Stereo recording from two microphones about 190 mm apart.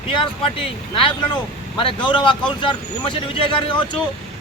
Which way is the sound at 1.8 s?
25° left (ahead or behind).